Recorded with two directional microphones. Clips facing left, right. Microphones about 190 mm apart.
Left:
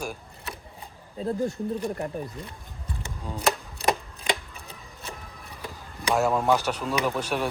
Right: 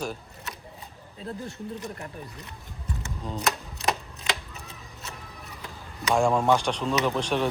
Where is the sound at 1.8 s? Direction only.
30° left (ahead or behind).